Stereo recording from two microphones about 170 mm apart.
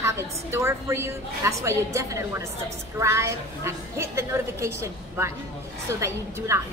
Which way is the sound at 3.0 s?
15° right (ahead or behind).